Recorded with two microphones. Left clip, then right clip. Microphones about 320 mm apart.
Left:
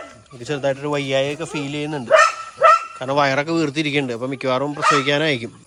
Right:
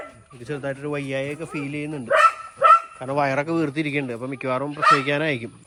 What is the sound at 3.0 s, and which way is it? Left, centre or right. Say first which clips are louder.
Speech: left 4 dB; centre.